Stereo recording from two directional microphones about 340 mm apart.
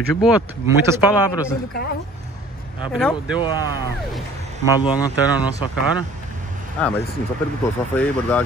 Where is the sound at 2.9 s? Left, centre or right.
Centre.